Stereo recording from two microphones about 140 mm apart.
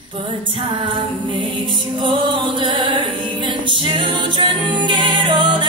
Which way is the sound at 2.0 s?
35° right (ahead or behind).